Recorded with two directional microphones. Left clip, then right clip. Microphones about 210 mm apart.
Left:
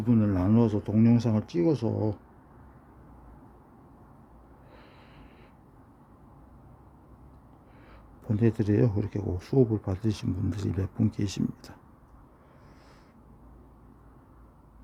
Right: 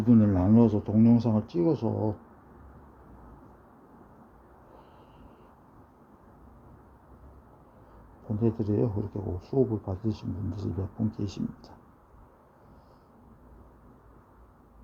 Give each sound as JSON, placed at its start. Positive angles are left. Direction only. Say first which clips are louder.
{"t": 0.0, "sound": "speech", "louder": "right 3 dB", "side_deg": 5}
{"t": 8.4, "sound": "speech", "louder": "left 2 dB", "side_deg": 30}